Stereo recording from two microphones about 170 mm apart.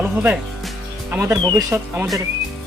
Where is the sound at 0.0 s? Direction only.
10° right (ahead or behind).